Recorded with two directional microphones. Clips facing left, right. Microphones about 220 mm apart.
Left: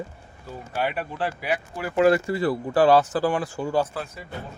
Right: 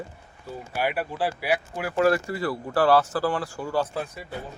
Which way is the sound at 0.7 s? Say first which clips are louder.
Even; 10° right (ahead or behind).